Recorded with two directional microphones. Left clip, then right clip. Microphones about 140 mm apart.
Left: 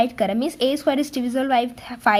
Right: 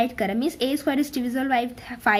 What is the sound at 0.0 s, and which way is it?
A woman's voice, 35° left (ahead or behind).